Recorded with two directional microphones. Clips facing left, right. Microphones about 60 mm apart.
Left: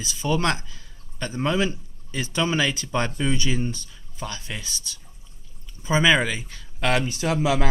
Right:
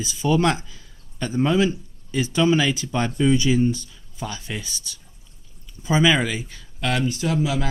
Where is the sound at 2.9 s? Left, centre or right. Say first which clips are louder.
Right 5 dB; centre.